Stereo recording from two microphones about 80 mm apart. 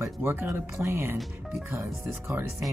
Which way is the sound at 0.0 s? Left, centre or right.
Right.